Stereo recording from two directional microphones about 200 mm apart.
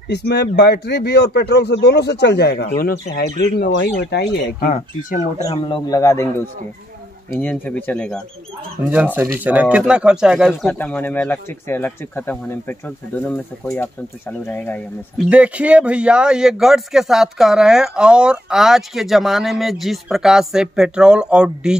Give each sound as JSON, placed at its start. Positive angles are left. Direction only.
{"t": 0.1, "sound": "speech", "side_deg": 55}
{"t": 5.4, "sound": "speech", "side_deg": 25}
{"t": 7.3, "sound": "speech", "side_deg": 5}
{"t": 8.9, "sound": "speech", "side_deg": -10}
{"t": 15.2, "sound": "speech", "side_deg": -5}